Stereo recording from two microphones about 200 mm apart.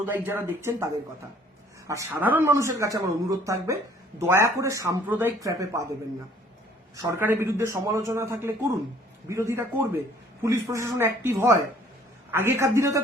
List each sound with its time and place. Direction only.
0.0 s speech: 10° right (ahead or behind)
1.9 s speech: 15° right (ahead or behind)
6.9 s speech: 15° right (ahead or behind)